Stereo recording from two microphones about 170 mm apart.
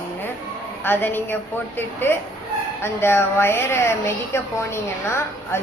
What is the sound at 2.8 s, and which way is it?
A woman's voice, 15° left (ahead or behind).